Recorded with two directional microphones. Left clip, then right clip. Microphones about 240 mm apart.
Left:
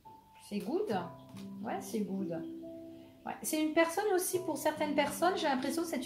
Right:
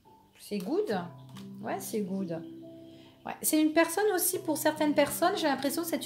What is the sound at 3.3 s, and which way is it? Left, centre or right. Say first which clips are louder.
A woman's voice: right 6 dB; right.